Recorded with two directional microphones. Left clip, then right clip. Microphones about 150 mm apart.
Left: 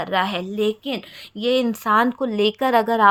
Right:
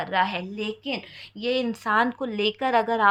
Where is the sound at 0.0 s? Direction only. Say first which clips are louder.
Left 2 dB; 55° left (ahead or behind).